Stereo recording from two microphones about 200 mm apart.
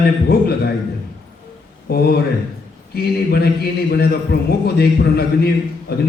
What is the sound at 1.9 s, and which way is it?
Mantra, 50° left (ahead or behind).